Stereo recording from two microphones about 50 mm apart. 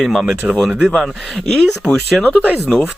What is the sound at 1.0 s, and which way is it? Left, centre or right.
Speech, centre.